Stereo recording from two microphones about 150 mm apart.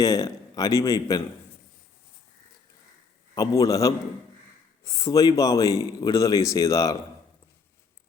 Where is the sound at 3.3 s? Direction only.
25° left (ahead or behind).